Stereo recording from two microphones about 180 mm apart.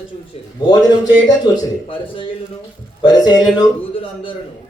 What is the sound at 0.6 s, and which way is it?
Speech, 25° left (ahead or behind).